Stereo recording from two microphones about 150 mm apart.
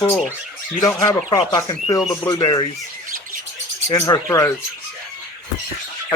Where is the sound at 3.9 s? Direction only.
20° left (ahead or behind).